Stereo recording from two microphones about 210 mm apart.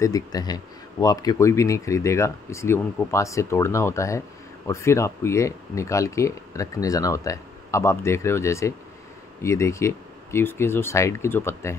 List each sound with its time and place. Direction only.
0.0 s speech: 15° left (ahead or behind)